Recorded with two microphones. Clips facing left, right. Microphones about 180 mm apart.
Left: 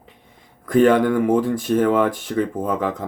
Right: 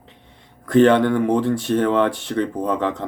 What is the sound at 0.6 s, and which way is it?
Speech, 5° left (ahead or behind).